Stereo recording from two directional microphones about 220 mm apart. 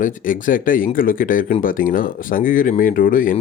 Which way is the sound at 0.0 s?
35° left (ahead or behind).